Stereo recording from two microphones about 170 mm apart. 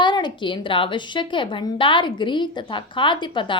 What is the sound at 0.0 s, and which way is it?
A woman's voice, 25° left (ahead or behind).